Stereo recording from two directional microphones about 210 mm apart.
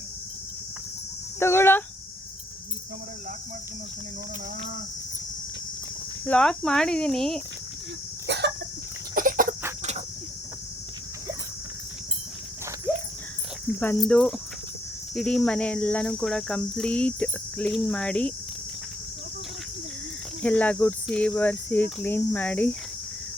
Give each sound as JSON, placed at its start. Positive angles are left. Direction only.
{"t": 1.4, "sound": "cricket", "side_deg": 10}
{"t": 6.2, "sound": "speech", "side_deg": 5}
{"t": 8.3, "sound": "chicken", "side_deg": -55}
{"t": 9.1, "sound": "chicken", "side_deg": -40}
{"t": 13.7, "sound": "speech", "side_deg": 5}
{"t": 20.4, "sound": "speech", "side_deg": 5}